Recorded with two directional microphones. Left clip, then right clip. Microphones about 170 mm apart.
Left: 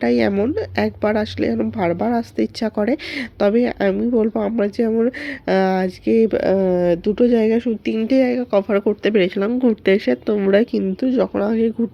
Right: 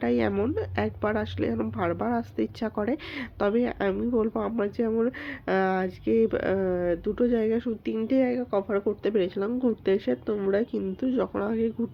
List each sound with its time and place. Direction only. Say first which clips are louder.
0.0 s speech: left 8 dB; 30° left (ahead or behind)